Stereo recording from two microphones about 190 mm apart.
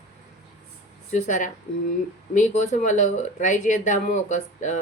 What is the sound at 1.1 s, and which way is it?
A woman's voice, 40° left (ahead or behind).